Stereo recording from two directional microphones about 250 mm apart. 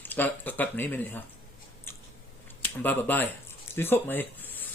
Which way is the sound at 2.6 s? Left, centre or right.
Centre.